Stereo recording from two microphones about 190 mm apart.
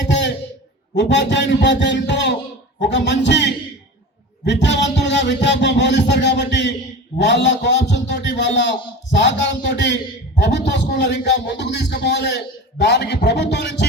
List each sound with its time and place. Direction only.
0.9 s a man's voice: 70° left (ahead or behind)
4.4 s music: 65° left (ahead or behind)
7.2 s a man's voice: 65° left (ahead or behind)